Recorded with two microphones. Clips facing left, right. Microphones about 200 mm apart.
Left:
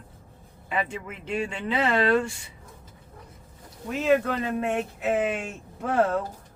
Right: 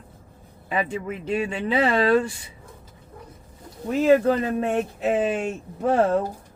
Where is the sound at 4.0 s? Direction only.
35° right (ahead or behind).